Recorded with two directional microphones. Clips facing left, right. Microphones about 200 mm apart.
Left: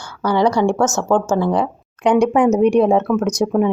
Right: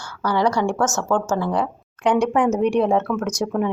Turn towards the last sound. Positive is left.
turn(degrees=15)  # may be behind; listen again after turning